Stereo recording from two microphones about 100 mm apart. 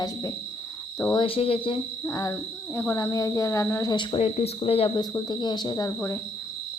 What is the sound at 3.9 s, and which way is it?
Speech, 50° left (ahead or behind).